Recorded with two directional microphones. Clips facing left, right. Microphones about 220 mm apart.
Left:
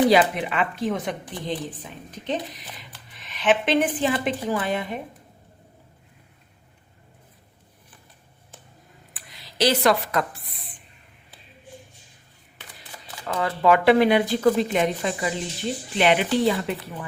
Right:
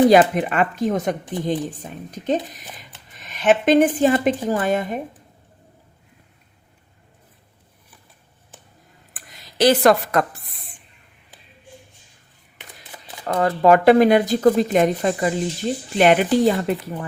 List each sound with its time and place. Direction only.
0.1 s a woman's voice: 45° right (ahead or behind)
9.1 s a sound: 45° right (ahead or behind)
13.2 s a woman's voice: 45° right (ahead or behind)